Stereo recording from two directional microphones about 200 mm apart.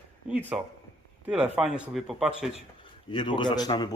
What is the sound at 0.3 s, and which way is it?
Speech, 5° right (ahead or behind).